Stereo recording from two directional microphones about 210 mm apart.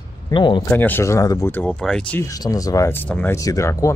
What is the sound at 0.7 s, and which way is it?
Speech, 10° left (ahead or behind).